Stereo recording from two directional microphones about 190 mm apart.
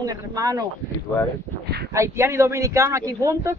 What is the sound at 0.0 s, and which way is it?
Speech, 20° right (ahead or behind).